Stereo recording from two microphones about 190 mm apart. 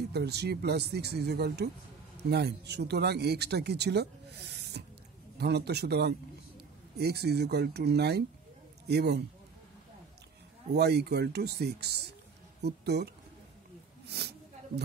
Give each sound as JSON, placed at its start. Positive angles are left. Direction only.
{"t": 0.1, "sound": "speech", "side_deg": -60}
{"t": 10.7, "sound": "speech", "side_deg": -60}